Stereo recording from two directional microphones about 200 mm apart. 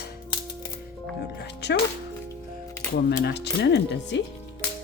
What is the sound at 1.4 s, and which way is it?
Music, 55° left (ahead or behind).